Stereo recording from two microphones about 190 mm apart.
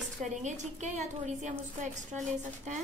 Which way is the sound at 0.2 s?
40° right (ahead or behind).